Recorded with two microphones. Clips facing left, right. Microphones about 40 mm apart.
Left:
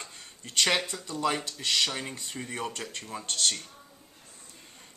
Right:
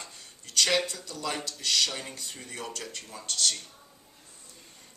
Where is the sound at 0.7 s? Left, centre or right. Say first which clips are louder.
Even; centre.